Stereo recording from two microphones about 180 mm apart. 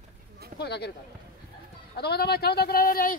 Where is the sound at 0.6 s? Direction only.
65° left (ahead or behind).